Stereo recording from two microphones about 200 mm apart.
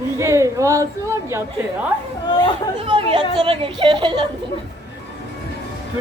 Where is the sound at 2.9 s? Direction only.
25° right (ahead or behind).